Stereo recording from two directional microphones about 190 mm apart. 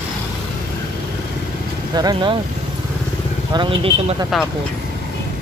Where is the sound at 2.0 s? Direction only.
25° right (ahead or behind).